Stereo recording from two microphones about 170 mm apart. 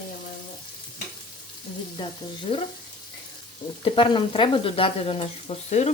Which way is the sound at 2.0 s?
25° left (ahead or behind).